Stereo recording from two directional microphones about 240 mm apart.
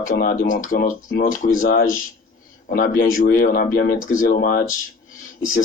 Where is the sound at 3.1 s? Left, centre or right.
Left.